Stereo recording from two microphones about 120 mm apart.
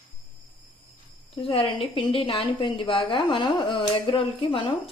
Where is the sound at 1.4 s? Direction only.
50° left (ahead or behind).